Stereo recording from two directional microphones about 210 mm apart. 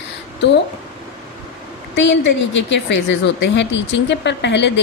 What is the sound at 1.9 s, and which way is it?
A woman's voice, 60° left (ahead or behind).